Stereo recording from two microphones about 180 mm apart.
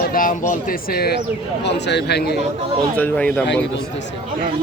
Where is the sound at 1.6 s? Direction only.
70° left (ahead or behind).